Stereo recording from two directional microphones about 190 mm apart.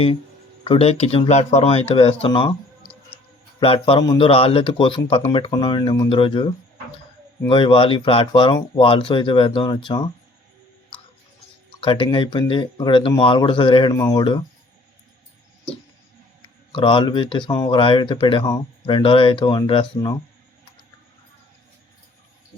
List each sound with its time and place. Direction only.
0.6 s speech: 30° left (ahead or behind)
3.6 s speech: 30° left (ahead or behind)
11.8 s speech: 25° left (ahead or behind)
16.7 s speech: 25° left (ahead or behind)